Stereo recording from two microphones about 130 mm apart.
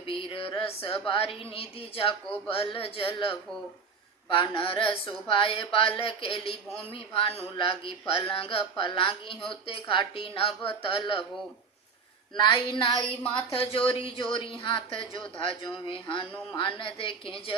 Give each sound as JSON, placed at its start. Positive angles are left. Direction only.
{"t": 0.1, "sound": "a sound", "side_deg": 45}
{"t": 1.0, "sound": "speech", "side_deg": 45}
{"t": 4.3, "sound": "speech", "side_deg": 40}
{"t": 12.4, "sound": "speech", "side_deg": 35}